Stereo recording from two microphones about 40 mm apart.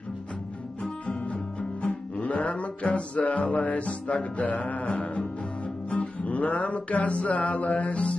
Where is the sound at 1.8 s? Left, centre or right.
Left.